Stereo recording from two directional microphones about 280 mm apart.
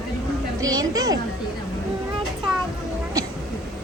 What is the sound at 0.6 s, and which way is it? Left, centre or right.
Speech, centre.